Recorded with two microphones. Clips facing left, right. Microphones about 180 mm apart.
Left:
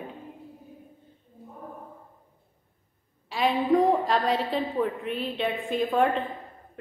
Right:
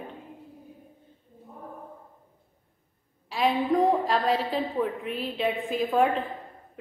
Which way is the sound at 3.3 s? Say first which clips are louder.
Left 1 dB; centre (ahead or behind).